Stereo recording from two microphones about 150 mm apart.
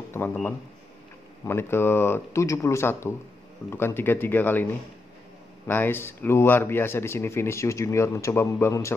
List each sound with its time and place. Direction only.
0.1 s speech: 10° left (ahead or behind)
5.7 s speech: 15° left (ahead or behind)